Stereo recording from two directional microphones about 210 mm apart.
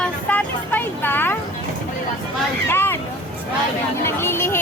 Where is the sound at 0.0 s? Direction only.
5° left (ahead or behind).